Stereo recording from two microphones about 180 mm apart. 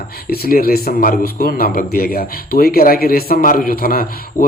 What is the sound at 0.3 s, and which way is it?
Speech, 55° left (ahead or behind).